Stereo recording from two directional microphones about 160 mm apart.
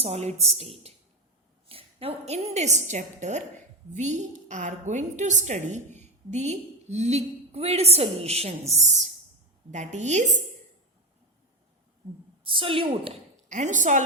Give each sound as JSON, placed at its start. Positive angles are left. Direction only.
{"t": 0.0, "sound": "a woman's voice", "side_deg": -40}
{"t": 9.7, "sound": "a woman's voice", "side_deg": -45}
{"t": 12.5, "sound": "a woman's voice", "side_deg": -35}
{"t": 13.5, "sound": "a woman's voice", "side_deg": -50}